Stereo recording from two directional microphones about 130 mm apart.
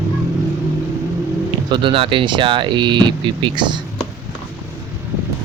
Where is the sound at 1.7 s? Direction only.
40° right (ahead or behind).